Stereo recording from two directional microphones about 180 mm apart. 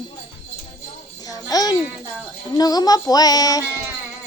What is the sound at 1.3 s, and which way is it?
Babbling, 20° left (ahead or behind).